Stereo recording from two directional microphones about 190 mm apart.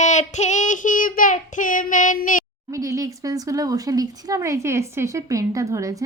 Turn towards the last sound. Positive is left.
turn(degrees=-15)  # may be behind; listen again after turning